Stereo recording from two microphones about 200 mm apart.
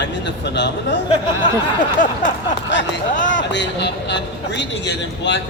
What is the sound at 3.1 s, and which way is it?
Speech, 40° left (ahead or behind).